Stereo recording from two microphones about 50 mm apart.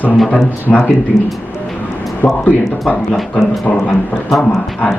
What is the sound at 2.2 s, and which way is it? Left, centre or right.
Speech, left.